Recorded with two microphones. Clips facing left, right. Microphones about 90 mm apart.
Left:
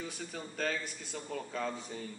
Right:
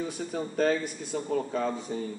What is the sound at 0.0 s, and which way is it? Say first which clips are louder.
Speech: right 9 dB; 25° right (ahead or behind).